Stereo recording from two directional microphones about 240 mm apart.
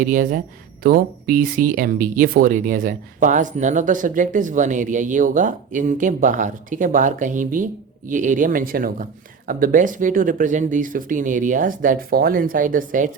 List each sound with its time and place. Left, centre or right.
0.0 s speech: right